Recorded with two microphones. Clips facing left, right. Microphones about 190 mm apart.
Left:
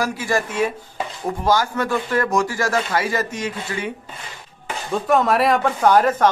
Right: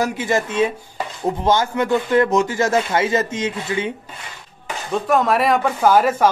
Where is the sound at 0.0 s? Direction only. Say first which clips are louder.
Right 2 dB; 20° right (ahead or behind).